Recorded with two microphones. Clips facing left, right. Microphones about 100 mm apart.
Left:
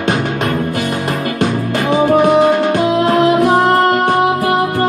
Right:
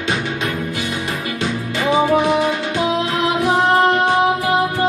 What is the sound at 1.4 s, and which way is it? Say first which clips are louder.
Music: left 5 dB; 50° left (ahead or behind).